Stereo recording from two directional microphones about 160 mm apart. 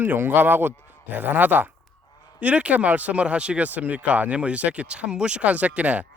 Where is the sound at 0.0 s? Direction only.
10° right (ahead or behind).